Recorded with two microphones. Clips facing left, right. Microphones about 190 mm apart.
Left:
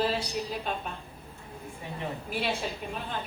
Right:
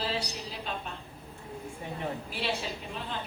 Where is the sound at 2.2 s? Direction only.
50° left (ahead or behind).